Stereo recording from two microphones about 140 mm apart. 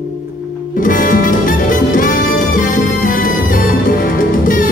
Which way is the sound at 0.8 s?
75° left (ahead or behind).